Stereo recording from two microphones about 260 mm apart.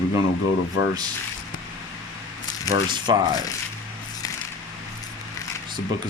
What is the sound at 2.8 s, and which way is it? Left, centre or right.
Speech, centre.